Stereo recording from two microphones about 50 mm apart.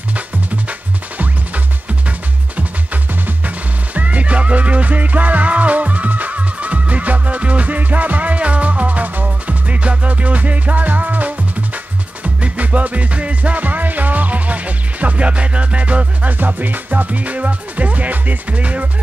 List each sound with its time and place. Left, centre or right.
0.7 s music: right